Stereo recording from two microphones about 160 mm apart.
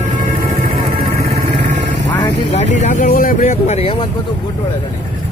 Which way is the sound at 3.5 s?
40° left (ahead or behind).